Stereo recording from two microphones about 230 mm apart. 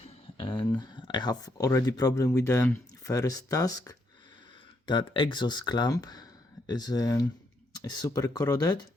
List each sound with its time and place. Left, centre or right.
0.0 s speech: left